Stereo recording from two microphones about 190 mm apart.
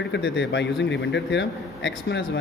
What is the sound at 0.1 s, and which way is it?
A man's voice, 65° left (ahead or behind).